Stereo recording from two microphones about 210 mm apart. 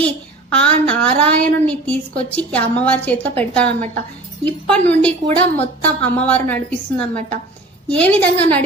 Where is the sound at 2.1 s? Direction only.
25° left (ahead or behind).